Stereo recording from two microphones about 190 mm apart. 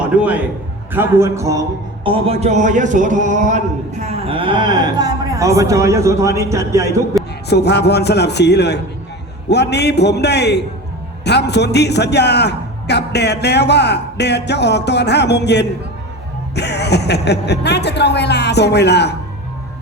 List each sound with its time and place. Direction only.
0.0 s a man's voice: 5° right (ahead or behind)
2.0 s a sound: 30° right (ahead or behind)
7.5 s a man's voice: 60° left (ahead or behind)